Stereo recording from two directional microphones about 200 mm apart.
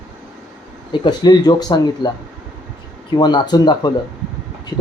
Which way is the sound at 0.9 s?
20° left (ahead or behind).